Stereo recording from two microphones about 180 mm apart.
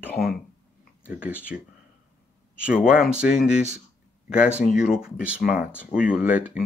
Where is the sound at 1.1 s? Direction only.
5° right (ahead or behind).